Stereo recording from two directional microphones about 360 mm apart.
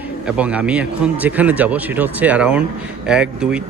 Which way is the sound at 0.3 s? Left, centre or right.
Centre.